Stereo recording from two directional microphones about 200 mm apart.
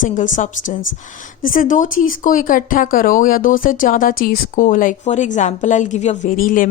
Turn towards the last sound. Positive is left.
turn(degrees=40)  # may be behind; listen again after turning